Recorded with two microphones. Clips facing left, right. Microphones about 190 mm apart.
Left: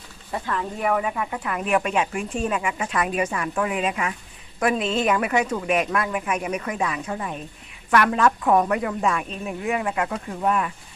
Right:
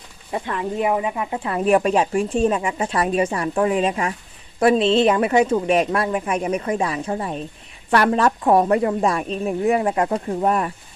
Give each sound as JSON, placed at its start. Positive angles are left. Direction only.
{"t": 0.3, "sound": "speech", "side_deg": -20}